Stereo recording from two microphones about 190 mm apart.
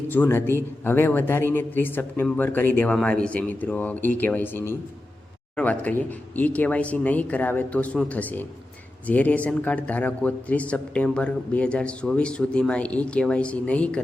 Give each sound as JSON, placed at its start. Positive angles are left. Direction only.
{"t": 0.1, "sound": "a man's voice", "side_deg": 10}